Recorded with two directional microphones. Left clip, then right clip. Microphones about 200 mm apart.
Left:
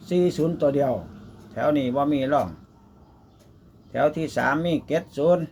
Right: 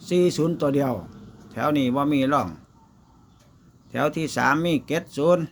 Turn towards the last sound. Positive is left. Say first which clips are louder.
# even
turn(degrees=-30)  # may be behind; listen again after turning